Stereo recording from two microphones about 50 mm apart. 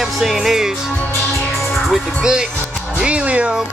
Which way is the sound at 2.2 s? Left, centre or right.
Centre.